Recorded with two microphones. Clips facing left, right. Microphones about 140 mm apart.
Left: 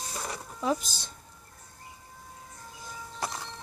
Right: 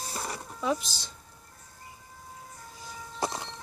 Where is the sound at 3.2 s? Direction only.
25° right (ahead or behind).